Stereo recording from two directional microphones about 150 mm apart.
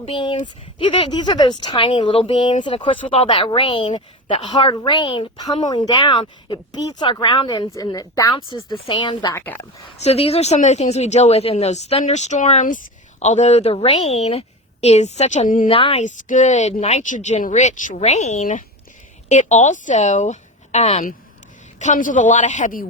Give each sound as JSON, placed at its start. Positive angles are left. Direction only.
{"t": 0.0, "sound": "speech", "side_deg": 35}
{"t": 9.3, "sound": "speech", "side_deg": 15}
{"t": 10.0, "sound": "a woman's voice", "side_deg": 45}
{"t": 15.6, "sound": "speech", "side_deg": 40}
{"t": 16.0, "sound": "a woman's voice", "side_deg": 55}
{"t": 21.8, "sound": "a man's voice", "side_deg": 60}